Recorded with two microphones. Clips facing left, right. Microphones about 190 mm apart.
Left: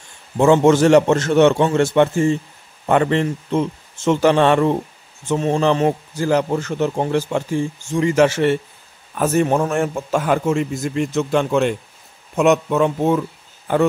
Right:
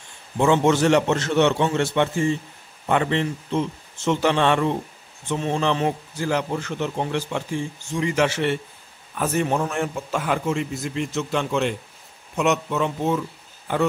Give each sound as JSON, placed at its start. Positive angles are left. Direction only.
{"t": 0.4, "sound": "a man's voice", "side_deg": 45}